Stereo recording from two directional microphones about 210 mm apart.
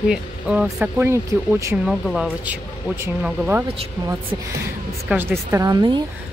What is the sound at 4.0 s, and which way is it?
Speech, 15° right (ahead or behind).